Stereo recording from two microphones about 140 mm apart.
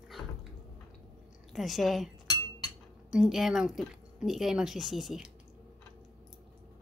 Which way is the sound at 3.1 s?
5° right (ahead or behind).